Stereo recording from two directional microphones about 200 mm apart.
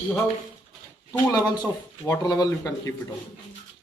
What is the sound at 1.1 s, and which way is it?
Speech, 20° left (ahead or behind).